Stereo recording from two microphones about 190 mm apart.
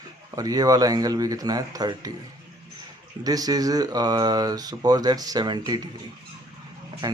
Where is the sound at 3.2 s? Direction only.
20° right (ahead or behind).